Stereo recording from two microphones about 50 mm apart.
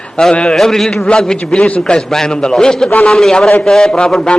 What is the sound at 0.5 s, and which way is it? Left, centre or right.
Speech, centre.